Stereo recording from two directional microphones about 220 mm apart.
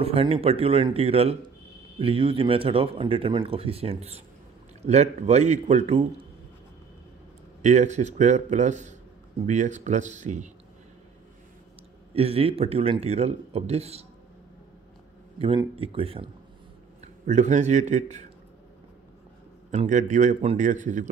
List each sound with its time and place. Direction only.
0.0 s speech: 25° right (ahead or behind)
7.6 s a man's voice: 30° right (ahead or behind)
12.1 s speech: 25° right (ahead or behind)
15.4 s speech: 25° right (ahead or behind)
17.3 s a man's voice: 30° right (ahead or behind)
19.7 s a man's voice: 35° right (ahead or behind)